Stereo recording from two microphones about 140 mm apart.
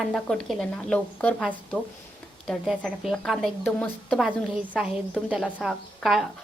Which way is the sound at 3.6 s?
15° left (ahead or behind).